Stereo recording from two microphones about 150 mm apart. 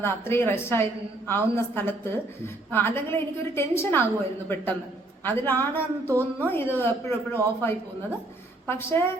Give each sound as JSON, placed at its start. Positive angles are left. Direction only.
{"t": 0.0, "sound": "a woman's voice", "side_deg": 15}